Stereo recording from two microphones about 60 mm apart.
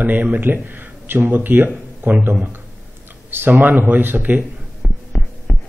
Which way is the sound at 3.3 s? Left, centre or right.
Right.